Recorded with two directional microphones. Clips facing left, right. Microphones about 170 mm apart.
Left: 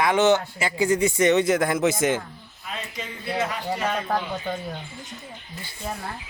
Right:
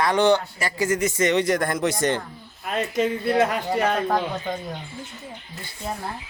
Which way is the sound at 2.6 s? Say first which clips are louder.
Right 12 dB; 55° right (ahead or behind).